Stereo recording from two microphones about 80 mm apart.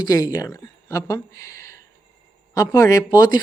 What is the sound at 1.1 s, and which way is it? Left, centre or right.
Speech, left.